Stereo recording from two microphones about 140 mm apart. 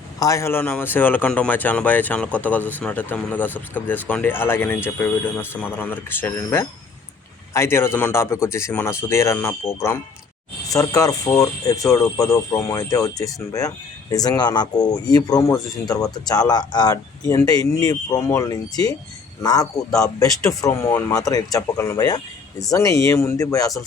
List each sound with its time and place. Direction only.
0.2 s a man's voice: 20° left (ahead or behind)